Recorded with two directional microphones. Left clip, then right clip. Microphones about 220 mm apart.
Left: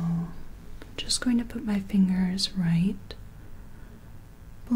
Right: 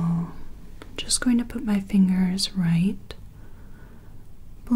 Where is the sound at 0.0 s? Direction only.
30° right (ahead or behind).